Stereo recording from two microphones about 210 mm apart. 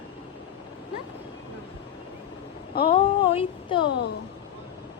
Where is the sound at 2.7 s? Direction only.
45° left (ahead or behind).